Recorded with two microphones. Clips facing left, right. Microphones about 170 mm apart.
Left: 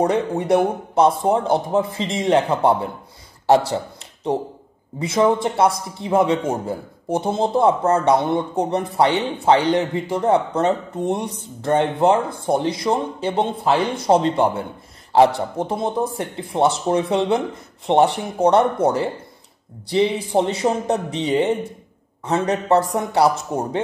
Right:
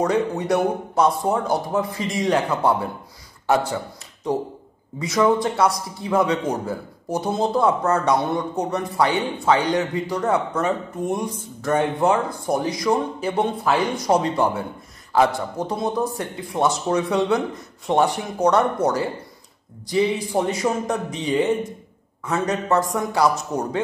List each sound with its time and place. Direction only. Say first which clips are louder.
0.0 s a man's voice: left 2 dB; 30° left (ahead or behind)
3.7 s a man's voice: left 3 dB; 25° left (ahead or behind)